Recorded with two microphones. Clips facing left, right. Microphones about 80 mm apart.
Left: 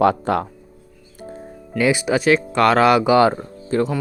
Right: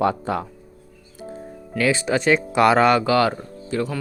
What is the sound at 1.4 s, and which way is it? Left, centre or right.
Speech, centre.